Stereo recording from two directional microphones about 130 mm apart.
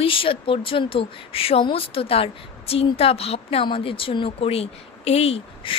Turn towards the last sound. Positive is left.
turn(degrees=50)  # may be behind; listen again after turning